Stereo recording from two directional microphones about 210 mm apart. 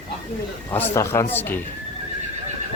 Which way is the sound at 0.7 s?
10° left (ahead or behind).